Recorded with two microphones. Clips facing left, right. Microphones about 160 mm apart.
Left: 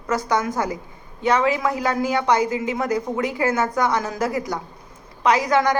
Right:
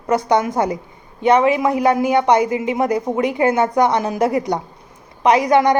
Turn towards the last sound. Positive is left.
turn(degrees=-20)  # may be behind; listen again after turning